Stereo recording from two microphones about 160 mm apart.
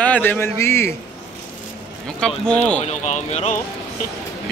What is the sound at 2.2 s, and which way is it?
Speech, 5° left (ahead or behind).